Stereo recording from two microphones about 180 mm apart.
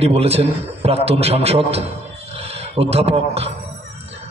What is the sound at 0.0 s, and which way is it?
A man's voice, 35° right (ahead or behind).